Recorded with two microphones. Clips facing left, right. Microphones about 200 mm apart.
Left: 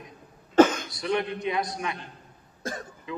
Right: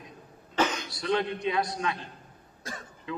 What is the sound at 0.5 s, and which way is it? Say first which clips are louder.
Throat clearing: left 10 dB; 50° left (ahead or behind).